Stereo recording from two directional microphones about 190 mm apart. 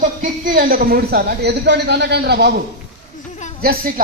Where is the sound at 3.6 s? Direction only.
50° right (ahead or behind).